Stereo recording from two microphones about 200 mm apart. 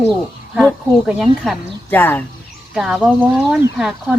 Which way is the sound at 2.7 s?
Centre (ahead or behind).